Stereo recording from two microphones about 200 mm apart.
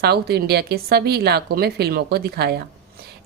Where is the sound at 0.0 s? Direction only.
55° right (ahead or behind).